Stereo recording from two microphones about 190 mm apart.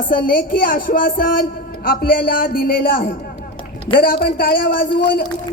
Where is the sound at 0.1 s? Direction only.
50° left (ahead or behind).